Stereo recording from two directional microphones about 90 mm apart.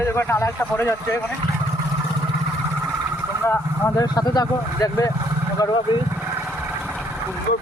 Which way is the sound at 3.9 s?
45° left (ahead or behind).